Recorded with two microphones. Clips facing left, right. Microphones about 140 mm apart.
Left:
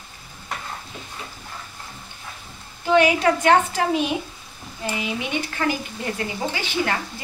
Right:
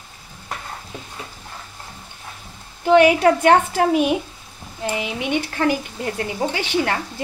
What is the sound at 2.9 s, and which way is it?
Speech, 60° right (ahead or behind).